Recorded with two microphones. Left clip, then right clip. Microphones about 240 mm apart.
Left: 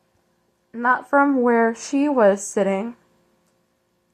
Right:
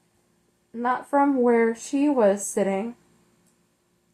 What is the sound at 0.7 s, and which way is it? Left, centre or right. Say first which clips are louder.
A woman's voice: left 5 dB; left.